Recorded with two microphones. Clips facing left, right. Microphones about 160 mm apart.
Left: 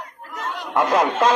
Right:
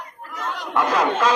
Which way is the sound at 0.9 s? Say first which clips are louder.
Left 2 dB; 50° left (ahead or behind).